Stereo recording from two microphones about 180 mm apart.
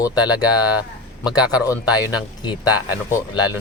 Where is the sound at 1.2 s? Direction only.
20° left (ahead or behind).